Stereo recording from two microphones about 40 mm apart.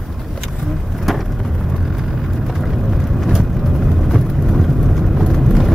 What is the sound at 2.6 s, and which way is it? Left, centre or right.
Vehicle, centre.